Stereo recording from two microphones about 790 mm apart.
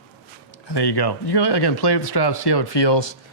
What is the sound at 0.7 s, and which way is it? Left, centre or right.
Speech, left.